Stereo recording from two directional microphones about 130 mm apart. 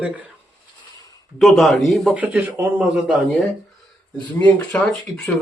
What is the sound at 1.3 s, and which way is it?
Speech, centre (ahead or behind).